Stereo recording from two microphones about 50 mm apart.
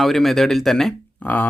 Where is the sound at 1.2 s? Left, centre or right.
Left.